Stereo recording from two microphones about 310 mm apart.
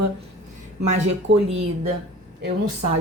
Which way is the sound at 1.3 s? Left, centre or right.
Right.